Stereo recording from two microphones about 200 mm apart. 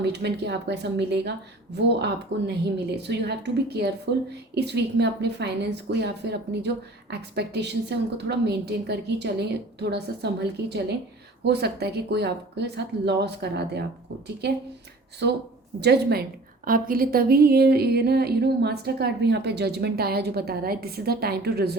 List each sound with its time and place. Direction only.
0.0 s a woman's voice: 55° right (ahead or behind)
16.6 s a woman's voice: 45° right (ahead or behind)